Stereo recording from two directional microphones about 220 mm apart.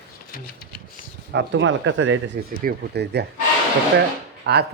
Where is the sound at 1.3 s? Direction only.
55° right (ahead or behind).